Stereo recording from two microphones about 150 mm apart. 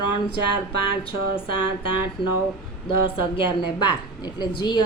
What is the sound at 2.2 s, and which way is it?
A woman's voice, 35° left (ahead or behind).